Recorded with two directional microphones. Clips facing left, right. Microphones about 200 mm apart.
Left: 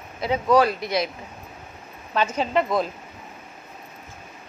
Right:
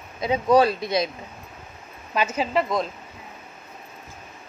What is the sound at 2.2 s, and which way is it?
Speech, 5° right (ahead or behind).